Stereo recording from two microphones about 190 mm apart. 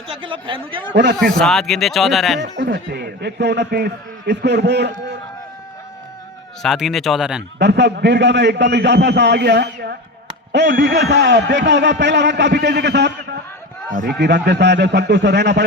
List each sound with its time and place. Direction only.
0.2 s a man's voice: 25° right (ahead or behind)
1.1 s speech: 5° left (ahead or behind)
2.4 s a man's voice: 65° right (ahead or behind)
6.6 s speech: centre (ahead or behind)
7.6 s a man's voice: 65° right (ahead or behind)